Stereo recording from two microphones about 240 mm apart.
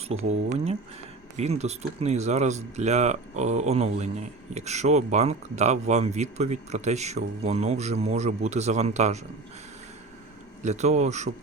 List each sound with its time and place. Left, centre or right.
0.1 s speech: right
10.6 s speech: right